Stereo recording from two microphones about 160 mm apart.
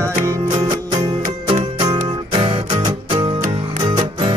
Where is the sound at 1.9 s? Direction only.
30° right (ahead or behind).